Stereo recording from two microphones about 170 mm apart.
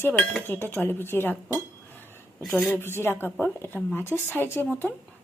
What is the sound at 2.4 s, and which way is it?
Speech, 5° left (ahead or behind).